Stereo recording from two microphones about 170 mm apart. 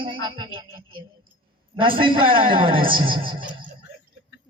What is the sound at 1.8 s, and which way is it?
A man's voice, 30° right (ahead or behind).